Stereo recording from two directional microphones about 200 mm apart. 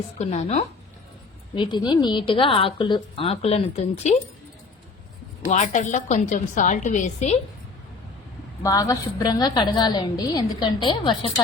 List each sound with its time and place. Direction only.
0.2 s a woman's voice: 30° left (ahead or behind)
5.5 s a woman's voice: 35° left (ahead or behind)
8.6 s a woman's voice: 15° left (ahead or behind)